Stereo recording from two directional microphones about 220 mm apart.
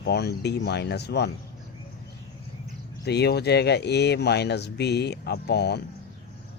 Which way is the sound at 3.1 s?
50° left (ahead or behind).